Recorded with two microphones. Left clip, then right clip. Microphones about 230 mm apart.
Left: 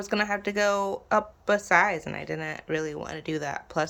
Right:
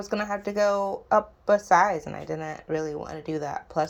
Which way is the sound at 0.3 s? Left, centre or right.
Left.